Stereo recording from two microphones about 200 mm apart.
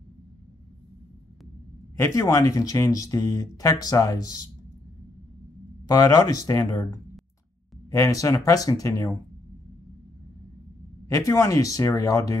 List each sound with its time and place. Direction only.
2.0 s speech: 15° left (ahead or behind)
5.9 s speech: 20° left (ahead or behind)
11.1 s speech: 15° left (ahead or behind)